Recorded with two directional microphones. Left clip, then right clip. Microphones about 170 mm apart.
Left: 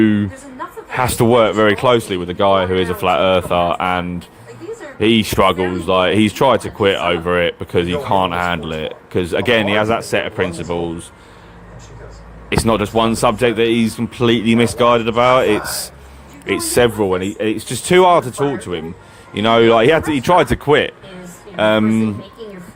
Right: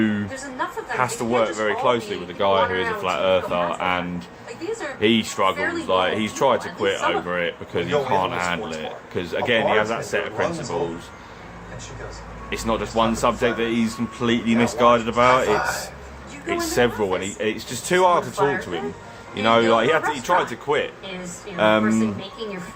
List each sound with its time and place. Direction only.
0.0 s a woman's voice: 50° left (ahead or behind)
12.5 s speech: 55° left (ahead or behind)